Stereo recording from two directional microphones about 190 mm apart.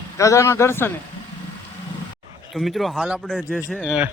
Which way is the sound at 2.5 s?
Centre (ahead or behind).